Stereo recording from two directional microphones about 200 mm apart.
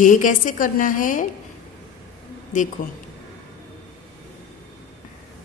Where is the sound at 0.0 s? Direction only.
40° left (ahead or behind).